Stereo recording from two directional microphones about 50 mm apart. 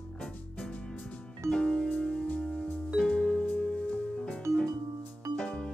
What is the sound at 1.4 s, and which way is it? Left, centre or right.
Music, centre.